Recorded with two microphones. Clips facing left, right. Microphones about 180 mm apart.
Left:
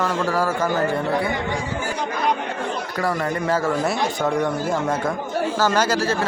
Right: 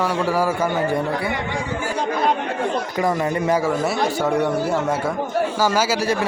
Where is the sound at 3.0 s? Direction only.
15° right (ahead or behind).